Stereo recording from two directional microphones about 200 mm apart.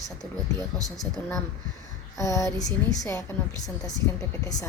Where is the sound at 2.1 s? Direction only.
15° left (ahead or behind).